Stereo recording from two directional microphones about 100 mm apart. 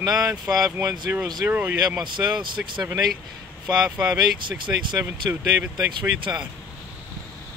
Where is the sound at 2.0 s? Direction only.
50° right (ahead or behind).